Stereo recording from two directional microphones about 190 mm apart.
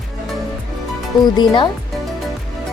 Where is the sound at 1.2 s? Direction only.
25° left (ahead or behind).